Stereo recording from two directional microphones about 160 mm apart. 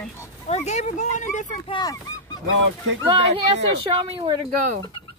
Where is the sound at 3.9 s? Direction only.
35° right (ahead or behind).